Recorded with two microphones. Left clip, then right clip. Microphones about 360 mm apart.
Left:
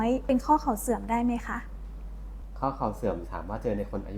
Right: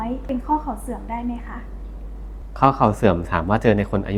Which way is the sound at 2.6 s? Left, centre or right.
Right.